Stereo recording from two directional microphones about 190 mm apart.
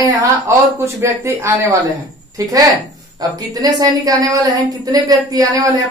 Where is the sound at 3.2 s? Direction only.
20° right (ahead or behind).